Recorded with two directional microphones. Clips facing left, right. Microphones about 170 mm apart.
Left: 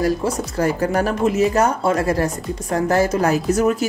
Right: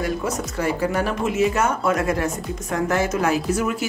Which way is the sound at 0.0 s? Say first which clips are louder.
Left 5 dB; 40° left (ahead or behind).